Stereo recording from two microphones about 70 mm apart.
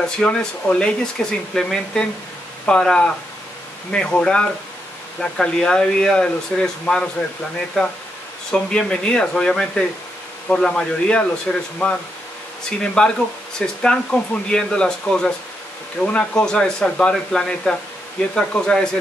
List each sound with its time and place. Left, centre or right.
0.0 s speech: centre
12.6 s speech: centre